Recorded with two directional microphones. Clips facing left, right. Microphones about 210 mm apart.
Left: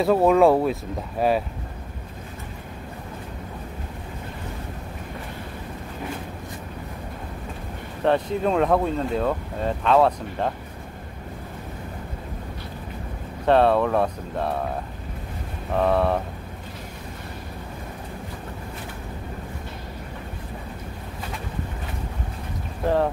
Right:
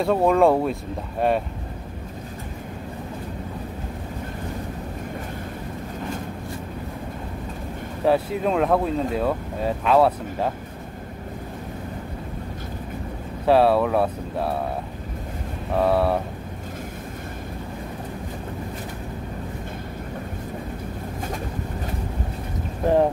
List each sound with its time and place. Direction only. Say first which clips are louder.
0.0 s speech: left 1 dB; centre (ahead or behind)
8.0 s speech: right 1 dB; 5° right (ahead or behind)
13.5 s speech: right 1 dB; 5° right (ahead or behind)
15.7 s speech: right 1 dB; 5° right (ahead or behind)